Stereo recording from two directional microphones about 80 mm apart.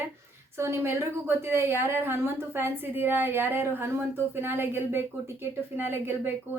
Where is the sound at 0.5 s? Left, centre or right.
Right.